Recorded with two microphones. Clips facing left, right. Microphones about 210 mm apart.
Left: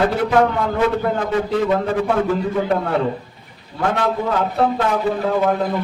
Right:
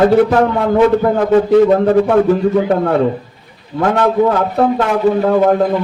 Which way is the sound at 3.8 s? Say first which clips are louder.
Right 7 dB; 50° right (ahead or behind).